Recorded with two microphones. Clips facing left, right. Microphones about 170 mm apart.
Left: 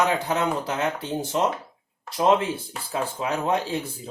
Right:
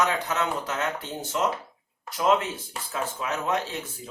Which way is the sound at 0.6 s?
30° left (ahead or behind).